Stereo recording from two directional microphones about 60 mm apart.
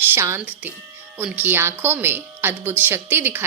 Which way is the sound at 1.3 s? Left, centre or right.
Right.